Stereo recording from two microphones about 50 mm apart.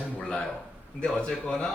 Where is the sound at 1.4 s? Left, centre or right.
Centre.